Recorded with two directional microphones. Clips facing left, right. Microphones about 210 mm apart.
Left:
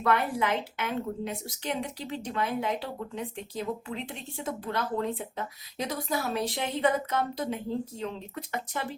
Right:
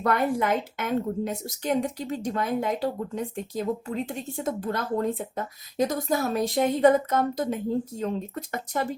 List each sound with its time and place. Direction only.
0.0 s a woman's voice: 45° right (ahead or behind)